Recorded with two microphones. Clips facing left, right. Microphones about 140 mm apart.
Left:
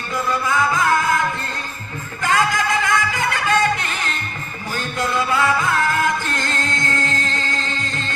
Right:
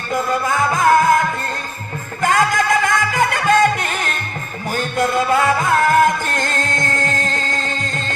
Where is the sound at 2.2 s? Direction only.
50° right (ahead or behind).